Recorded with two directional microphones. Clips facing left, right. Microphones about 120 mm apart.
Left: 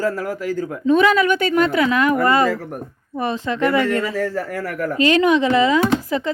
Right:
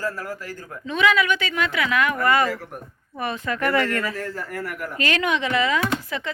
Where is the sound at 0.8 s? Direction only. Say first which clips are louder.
Left 6 dB; 40° left (ahead or behind); by 4.1 s 20° left (ahead or behind).